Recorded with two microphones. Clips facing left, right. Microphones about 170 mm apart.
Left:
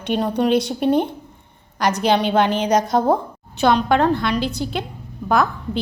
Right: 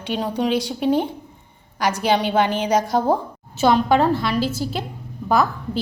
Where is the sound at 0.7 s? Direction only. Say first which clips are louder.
Left 1 dB; 60° left (ahead or behind).